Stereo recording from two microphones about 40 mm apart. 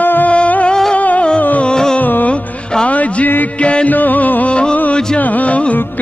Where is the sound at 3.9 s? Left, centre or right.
Left.